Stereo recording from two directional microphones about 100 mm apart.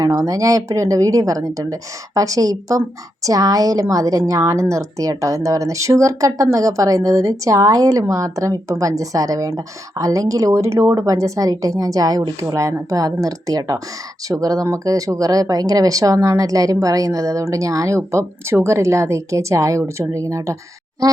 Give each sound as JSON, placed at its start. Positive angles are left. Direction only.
{"t": 0.0, "sound": "a woman's voice", "side_deg": -35}